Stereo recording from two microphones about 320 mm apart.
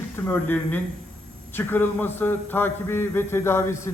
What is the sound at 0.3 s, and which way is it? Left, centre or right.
A man's voice, centre.